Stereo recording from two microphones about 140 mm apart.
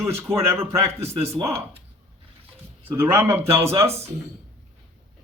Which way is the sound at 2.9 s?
20° right (ahead or behind).